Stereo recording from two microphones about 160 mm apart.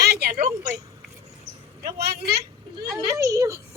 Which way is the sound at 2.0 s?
80° right.